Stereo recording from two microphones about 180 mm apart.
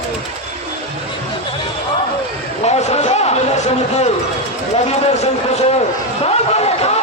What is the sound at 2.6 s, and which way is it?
Basketball bounce, 35° left (ahead or behind).